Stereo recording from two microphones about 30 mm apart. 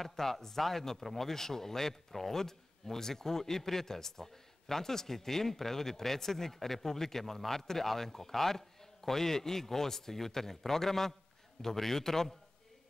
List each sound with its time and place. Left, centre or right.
0.0 s speech: centre